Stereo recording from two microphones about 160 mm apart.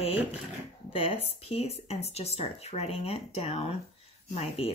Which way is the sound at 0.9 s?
40° left (ahead or behind).